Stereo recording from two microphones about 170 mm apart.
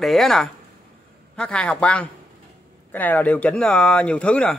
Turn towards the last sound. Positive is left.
turn(degrees=5)  # may be behind; listen again after turning